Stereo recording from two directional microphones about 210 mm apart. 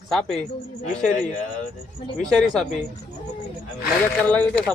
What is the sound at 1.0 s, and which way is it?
Speech, 35° left (ahead or behind).